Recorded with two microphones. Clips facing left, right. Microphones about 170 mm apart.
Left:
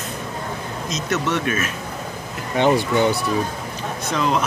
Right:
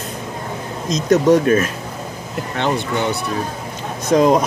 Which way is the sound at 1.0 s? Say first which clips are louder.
Right 10 dB; 40° right (ahead or behind).